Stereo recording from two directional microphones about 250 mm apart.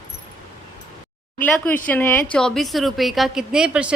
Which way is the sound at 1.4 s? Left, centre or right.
Centre.